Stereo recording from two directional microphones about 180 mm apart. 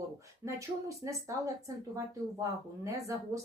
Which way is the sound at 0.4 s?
15° right (ahead or behind).